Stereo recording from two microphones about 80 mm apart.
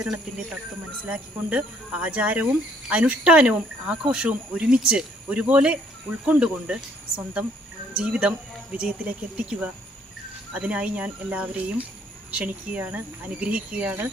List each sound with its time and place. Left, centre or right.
1.0 s speech: centre
7.9 s speech: centre